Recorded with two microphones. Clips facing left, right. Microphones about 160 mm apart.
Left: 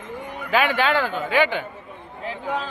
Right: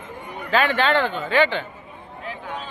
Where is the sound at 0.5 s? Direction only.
10° left (ahead or behind).